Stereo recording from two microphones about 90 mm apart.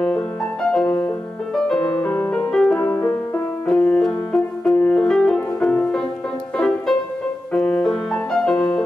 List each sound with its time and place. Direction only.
0.0 s music: 5° left (ahead or behind)
2.5 s music: 5° left (ahead or behind)
2.8 s music: 20° left (ahead or behind)
3.6 s music: 10° left (ahead or behind)